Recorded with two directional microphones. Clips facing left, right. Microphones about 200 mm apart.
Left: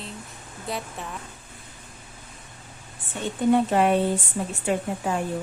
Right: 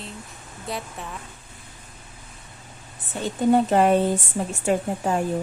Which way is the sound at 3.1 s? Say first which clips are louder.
Right 1 dB; 40° right (ahead or behind).